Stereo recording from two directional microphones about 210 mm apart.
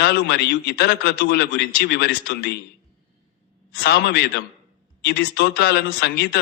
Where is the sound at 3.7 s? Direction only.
50° left (ahead or behind).